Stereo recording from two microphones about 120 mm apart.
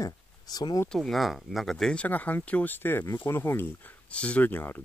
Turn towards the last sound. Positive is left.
turn(degrees=15)  # may be behind; listen again after turning